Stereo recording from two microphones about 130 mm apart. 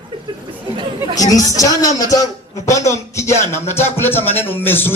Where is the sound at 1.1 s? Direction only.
25° left (ahead or behind).